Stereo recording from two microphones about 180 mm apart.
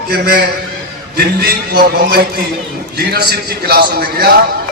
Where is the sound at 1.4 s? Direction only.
60° right (ahead or behind).